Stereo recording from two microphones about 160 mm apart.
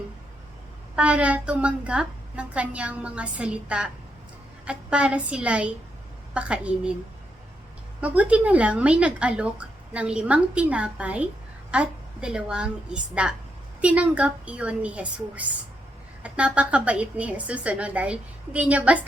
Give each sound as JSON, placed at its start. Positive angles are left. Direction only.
{"t": 0.9, "sound": "speech", "side_deg": -10}
{"t": 8.0, "sound": "a woman's voice", "side_deg": -10}